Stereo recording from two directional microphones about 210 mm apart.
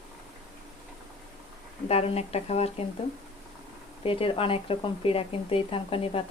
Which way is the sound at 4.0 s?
25° left (ahead or behind).